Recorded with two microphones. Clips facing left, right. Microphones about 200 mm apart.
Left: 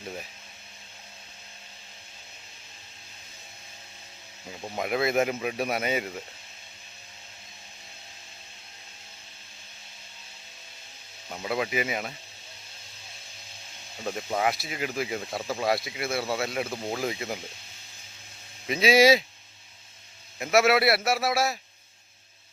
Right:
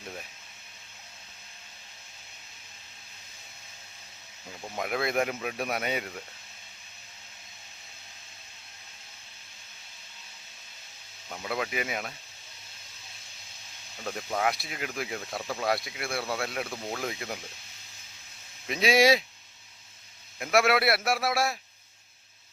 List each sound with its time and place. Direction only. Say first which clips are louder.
4.8 s speech: left 3 dB; 5° left (ahead or behind)
11.3 s speech: left 3 dB; 5° left (ahead or behind)
14.0 s speech: left 2 dB; 10° left (ahead or behind)
16.6 s speech: left 4 dB; 25° left (ahead or behind)
16.9 s speech: left 4 dB; 5° left (ahead or behind)
18.7 s speech: left 3 dB; centre (ahead or behind)
20.4 s speech: left 3 dB; centre (ahead or behind)